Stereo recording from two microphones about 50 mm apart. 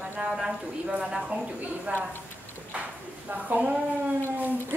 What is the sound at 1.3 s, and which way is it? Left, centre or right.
Speech, right.